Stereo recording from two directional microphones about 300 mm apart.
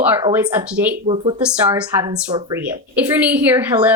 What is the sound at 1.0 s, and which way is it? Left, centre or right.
Speech, centre.